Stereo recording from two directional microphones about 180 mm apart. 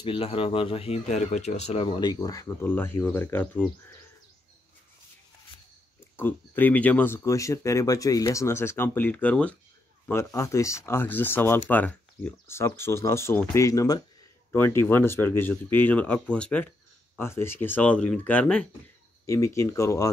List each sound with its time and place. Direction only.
0.0 s speech: 30° left (ahead or behind); by 3.7 s 10° left (ahead or behind)
6.1 s speech: 10° left (ahead or behind)
19.2 s speech: 15° left (ahead or behind)